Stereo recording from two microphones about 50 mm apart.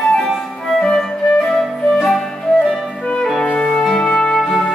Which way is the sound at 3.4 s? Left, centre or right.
Left.